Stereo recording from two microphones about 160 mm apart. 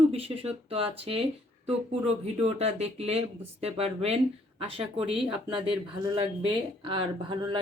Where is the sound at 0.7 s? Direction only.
35° right (ahead or behind).